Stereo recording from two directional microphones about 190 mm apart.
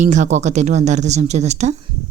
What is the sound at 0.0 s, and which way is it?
A woman's voice, 40° right (ahead or behind).